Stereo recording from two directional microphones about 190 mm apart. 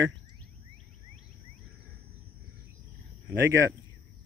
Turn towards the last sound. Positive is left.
turn(degrees=-15)  # may be behind; listen again after turning